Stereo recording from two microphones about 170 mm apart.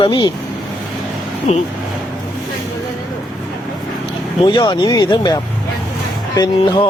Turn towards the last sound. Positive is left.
turn(degrees=25)  # may be behind; listen again after turning